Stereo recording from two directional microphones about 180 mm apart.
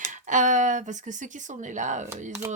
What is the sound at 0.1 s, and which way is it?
Speech, 45° right (ahead or behind).